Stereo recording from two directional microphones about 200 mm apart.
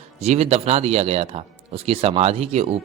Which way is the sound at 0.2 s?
30° right (ahead or behind).